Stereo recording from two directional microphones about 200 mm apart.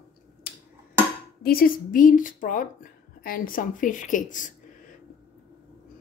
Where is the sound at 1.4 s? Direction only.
50° left (ahead or behind).